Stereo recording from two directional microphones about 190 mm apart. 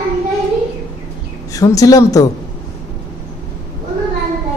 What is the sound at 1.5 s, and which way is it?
Speech, 20° left (ahead or behind).